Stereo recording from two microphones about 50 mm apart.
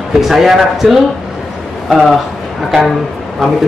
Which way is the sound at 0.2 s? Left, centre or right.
Centre.